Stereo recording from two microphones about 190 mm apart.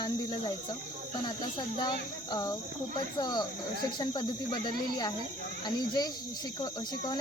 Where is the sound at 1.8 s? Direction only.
25° left (ahead or behind).